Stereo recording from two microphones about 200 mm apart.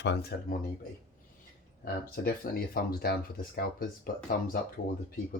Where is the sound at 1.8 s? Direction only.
50° left (ahead or behind).